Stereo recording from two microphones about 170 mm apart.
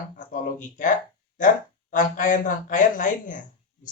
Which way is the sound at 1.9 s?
50° left (ahead or behind).